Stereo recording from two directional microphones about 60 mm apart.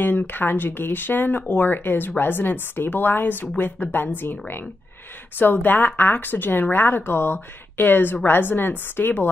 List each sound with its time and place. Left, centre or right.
0.0 s speech: left
5.4 s speech: left